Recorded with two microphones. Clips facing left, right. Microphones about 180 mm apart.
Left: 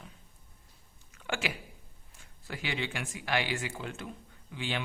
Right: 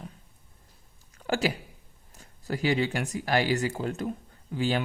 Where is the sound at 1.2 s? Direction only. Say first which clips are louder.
Right 8 dB; 40° right (ahead or behind).